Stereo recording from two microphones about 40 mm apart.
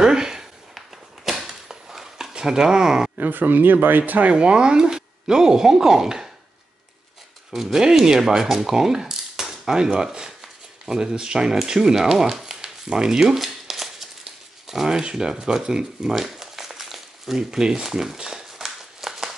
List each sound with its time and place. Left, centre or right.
0.0 s a sound: centre
1.4 s dishes: centre
2.3 s speech: centre
3.2 s speech: right
4.3 s speech: right
7.5 s speech: centre
11.7 s a sound: centre
15.4 s speech: centre
16.2 s crumpling: centre
17.4 s speech: centre
17.8 s a sound: centre